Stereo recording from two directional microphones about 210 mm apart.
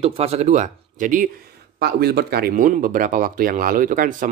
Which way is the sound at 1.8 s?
50° right (ahead or behind).